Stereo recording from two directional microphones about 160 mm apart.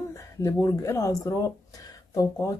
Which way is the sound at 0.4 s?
20° left (ahead or behind).